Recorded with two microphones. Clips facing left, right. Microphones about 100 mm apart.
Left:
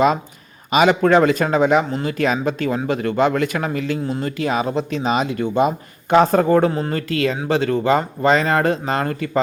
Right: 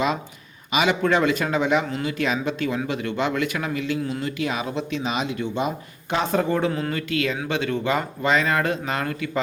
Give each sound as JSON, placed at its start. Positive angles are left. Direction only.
{"t": 0.7, "sound": "speech", "side_deg": 45}
{"t": 6.7, "sound": "speech", "side_deg": 35}